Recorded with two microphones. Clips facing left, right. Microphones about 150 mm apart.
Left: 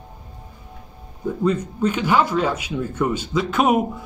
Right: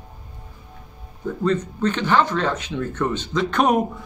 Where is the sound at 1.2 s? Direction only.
10° left (ahead or behind).